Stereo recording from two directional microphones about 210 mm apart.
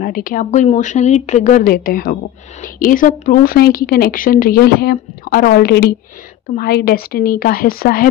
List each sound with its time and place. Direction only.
0.0 s a woman's voice: 40° left (ahead or behind)